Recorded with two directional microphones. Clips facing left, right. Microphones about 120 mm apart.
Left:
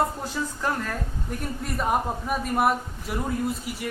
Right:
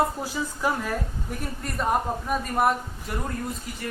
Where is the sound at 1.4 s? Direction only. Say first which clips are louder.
Even; centre (ahead or behind).